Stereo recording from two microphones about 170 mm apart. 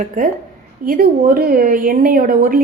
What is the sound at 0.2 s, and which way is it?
A woman's voice, 50° right (ahead or behind).